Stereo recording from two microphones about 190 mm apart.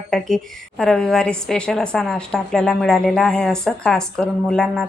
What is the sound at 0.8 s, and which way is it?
A woman's voice, 5° left (ahead or behind).